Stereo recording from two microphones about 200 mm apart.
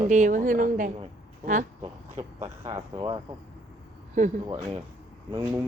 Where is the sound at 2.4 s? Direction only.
20° right (ahead or behind).